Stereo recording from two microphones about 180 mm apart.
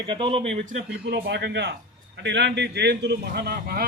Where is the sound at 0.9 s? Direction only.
70° right (ahead or behind).